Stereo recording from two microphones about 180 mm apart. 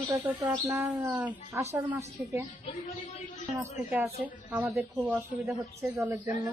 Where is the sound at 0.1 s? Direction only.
15° right (ahead or behind).